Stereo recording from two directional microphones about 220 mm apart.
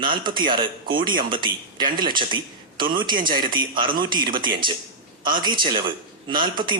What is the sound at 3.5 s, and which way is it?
Speech, 20° right (ahead or behind).